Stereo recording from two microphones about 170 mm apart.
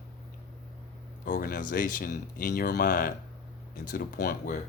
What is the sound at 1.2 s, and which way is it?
Speech, 55° left (ahead or behind).